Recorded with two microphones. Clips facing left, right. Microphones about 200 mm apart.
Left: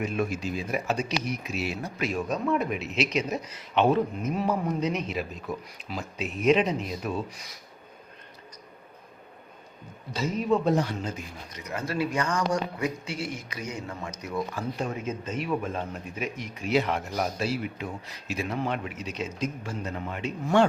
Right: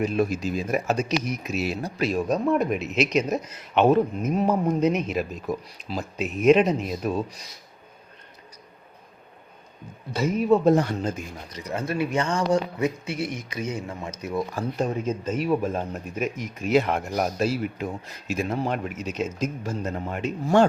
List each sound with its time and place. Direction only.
0.0 s speech: 35° right (ahead or behind)
10.1 s speech: 50° right (ahead or behind)
11.7 s speech: 25° right (ahead or behind)
15.4 s speech: 40° right (ahead or behind)